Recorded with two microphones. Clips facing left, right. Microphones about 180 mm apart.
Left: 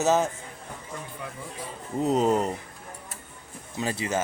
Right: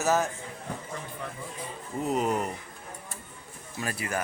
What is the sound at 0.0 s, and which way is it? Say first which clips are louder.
Speech: left 3 dB; 20° left (ahead or behind).